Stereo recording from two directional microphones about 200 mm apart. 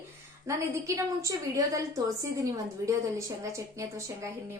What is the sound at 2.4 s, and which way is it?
A woman's voice, 15° right (ahead or behind).